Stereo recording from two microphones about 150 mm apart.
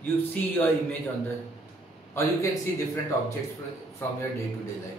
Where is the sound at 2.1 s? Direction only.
20° left (ahead or behind).